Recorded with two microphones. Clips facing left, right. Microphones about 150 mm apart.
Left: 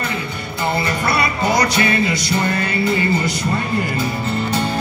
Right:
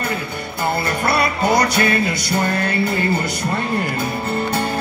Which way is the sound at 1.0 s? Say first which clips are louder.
Right 3 dB; 55° right (ahead or behind).